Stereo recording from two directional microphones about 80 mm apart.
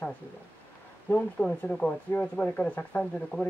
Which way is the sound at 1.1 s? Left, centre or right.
Centre.